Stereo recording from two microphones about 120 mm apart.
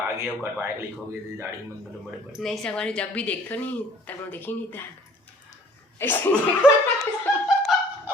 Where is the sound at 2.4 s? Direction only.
Centre (ahead or behind).